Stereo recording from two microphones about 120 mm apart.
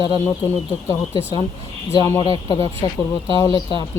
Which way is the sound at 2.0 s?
30° left (ahead or behind).